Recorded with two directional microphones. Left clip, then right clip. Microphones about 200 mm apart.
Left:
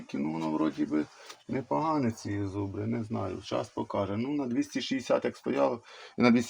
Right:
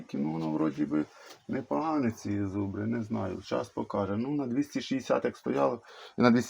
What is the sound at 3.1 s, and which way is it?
Speech, 15° right (ahead or behind).